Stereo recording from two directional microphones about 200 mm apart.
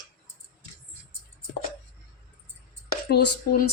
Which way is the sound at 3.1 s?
50° left (ahead or behind).